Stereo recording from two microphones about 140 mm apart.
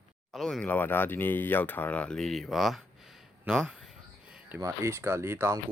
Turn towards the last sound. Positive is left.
turn(degrees=-20)  # may be behind; listen again after turning